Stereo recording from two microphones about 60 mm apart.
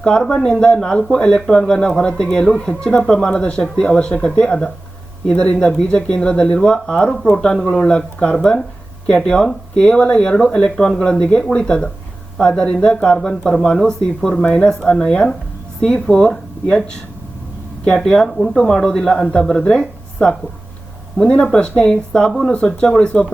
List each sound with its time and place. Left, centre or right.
0.0 s speech: centre
17.8 s speech: centre